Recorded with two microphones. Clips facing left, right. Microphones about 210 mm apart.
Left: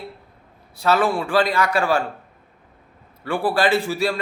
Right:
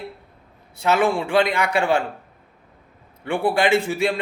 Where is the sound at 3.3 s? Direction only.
20° right (ahead or behind).